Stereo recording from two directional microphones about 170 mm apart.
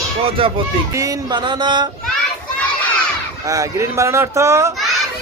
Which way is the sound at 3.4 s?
20° right (ahead or behind).